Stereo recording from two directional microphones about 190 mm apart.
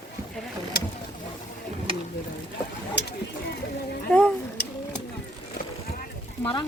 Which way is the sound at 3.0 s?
65° left (ahead or behind).